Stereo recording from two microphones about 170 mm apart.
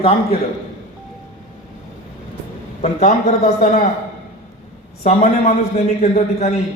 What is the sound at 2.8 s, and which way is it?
A man's voice, 40° left (ahead or behind).